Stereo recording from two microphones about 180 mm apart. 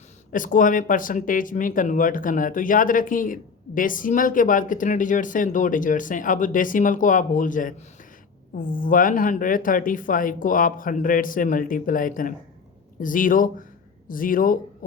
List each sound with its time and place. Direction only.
0.3 s speech: 50° left (ahead or behind)